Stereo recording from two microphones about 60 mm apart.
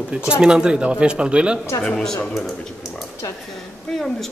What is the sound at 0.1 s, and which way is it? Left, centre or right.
Speech, centre.